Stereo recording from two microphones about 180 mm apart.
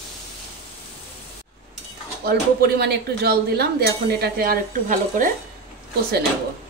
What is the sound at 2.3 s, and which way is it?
Speech, 60° right (ahead or behind).